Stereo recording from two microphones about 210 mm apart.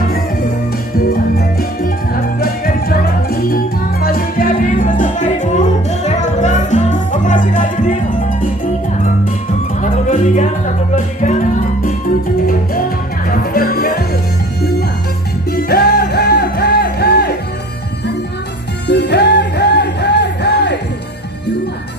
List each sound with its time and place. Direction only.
0.9 s music: 45° left (ahead or behind)
9.8 s music: 35° left (ahead or behind)
13.3 s music: 45° left (ahead or behind)
15.4 s music: 45° left (ahead or behind)
18.9 s music: 55° left (ahead or behind)